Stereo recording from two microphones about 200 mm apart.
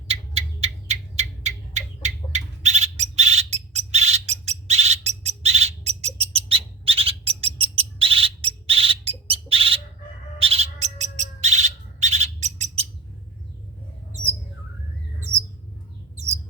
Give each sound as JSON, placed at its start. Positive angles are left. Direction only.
{"t": 0.1, "sound": "rodents", "side_deg": -30}
{"t": 10.3, "sound": "owl", "side_deg": -30}
{"t": 14.1, "sound": "bird", "side_deg": -35}
{"t": 16.1, "sound": "bird", "side_deg": -35}